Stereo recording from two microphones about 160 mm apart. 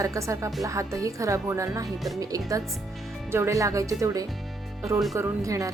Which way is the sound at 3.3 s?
15° right (ahead or behind).